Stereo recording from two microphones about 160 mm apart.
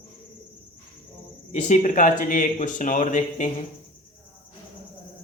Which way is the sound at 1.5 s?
50° left (ahead or behind).